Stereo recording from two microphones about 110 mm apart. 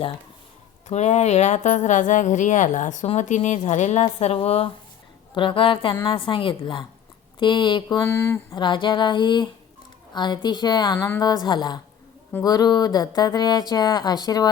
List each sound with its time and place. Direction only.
0.9 s speech: 90° left; by 8.0 s 45° left (ahead or behind)
8.0 s speech: 25° left (ahead or behind)
8.5 s speech: 45° left (ahead or behind)